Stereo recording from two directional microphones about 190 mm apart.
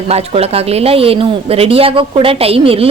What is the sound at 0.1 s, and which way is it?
A woman's voice, 30° right (ahead or behind).